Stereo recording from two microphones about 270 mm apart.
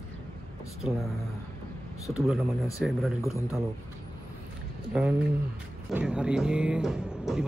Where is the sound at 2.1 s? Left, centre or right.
Centre.